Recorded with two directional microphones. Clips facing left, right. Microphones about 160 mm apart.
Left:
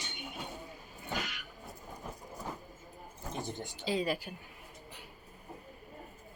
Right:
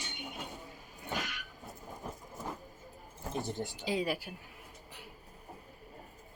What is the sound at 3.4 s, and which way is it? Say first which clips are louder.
Speech: right 2 dB; centre (ahead or behind).